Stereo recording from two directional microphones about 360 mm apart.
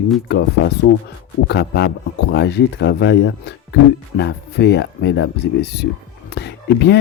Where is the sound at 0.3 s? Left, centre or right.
Left.